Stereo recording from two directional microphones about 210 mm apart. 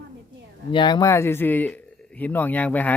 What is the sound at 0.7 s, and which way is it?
Speech, 20° left (ahead or behind).